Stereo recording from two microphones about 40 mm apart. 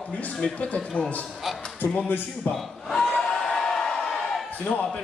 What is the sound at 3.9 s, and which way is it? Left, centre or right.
Crowd, centre.